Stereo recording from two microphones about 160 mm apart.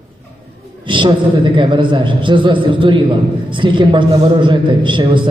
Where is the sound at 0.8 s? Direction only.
30° right (ahead or behind).